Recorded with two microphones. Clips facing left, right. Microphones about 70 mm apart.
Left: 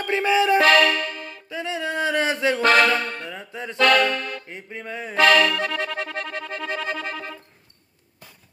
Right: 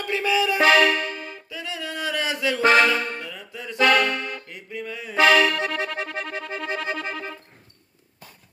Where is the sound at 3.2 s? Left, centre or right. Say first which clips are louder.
Left 3 dB; left.